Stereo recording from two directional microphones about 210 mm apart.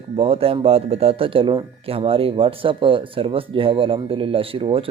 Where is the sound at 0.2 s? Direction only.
25° right (ahead or behind).